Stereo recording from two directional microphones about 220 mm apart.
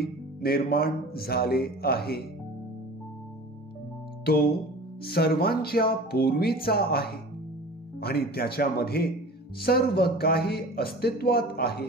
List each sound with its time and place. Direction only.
0.0 s speech: 45° left (ahead or behind)
4.3 s speech: 45° left (ahead or behind)